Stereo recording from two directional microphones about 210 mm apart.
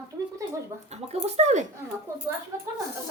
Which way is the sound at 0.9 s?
30° right (ahead or behind).